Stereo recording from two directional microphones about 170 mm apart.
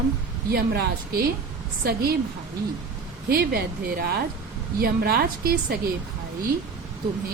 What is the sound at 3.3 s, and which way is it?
A woman's voice, 60° right (ahead or behind).